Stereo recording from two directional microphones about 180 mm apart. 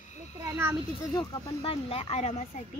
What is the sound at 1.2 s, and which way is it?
Speech, 30° left (ahead or behind).